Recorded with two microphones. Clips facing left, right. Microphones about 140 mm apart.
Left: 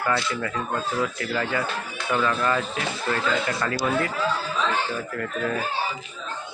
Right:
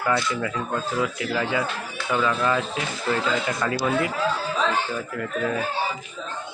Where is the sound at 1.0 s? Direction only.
15° right (ahead or behind).